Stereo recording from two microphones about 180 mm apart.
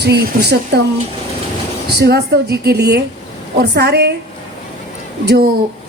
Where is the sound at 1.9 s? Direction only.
65° right (ahead or behind).